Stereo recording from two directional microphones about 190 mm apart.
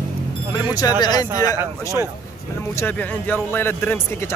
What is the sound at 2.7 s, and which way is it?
Speech, 10° left (ahead or behind).